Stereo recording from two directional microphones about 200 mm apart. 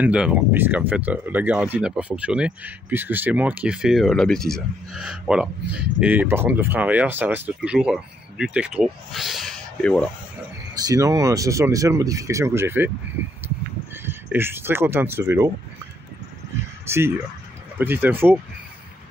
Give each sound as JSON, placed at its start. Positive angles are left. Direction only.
{"t": 0.0, "sound": "speech", "side_deg": -5}
{"t": 10.7, "sound": "speech", "side_deg": -20}
{"t": 14.0, "sound": "speech", "side_deg": -10}
{"t": 16.8, "sound": "speech", "side_deg": -10}